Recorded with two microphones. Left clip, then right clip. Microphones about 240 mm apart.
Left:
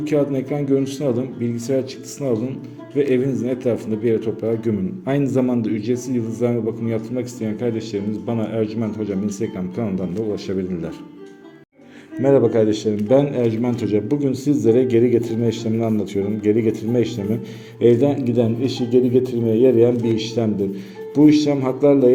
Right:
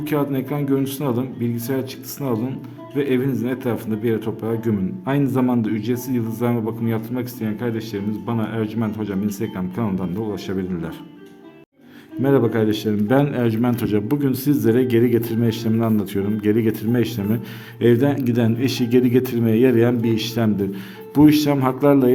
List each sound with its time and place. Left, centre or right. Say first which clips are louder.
0.0 s a man's voice: left 3 dB; centre
12.2 s a man's voice: left 3 dB; centre
17.7 s a man's voice: left 2 dB; right
20.2 s a man's voice: left 1 dB; right
21.2 s a man's voice: left 1 dB; right